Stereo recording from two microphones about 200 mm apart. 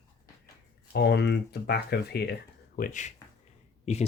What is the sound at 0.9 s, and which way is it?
Speech, 55° left (ahead or behind).